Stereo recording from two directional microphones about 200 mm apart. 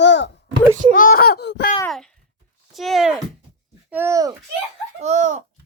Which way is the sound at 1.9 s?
Centre (ahead or behind).